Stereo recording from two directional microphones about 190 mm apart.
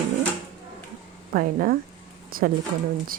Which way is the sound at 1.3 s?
50° right (ahead or behind).